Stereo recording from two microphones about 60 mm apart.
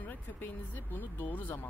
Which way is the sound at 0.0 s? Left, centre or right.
Left.